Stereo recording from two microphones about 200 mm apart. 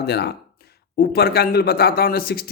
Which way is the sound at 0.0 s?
55° left (ahead or behind).